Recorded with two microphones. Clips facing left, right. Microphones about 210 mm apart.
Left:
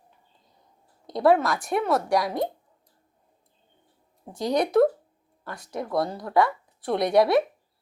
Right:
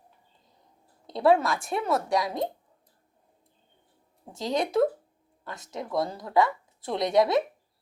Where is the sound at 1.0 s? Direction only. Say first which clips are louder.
Left 2 dB; 25° right (ahead or behind).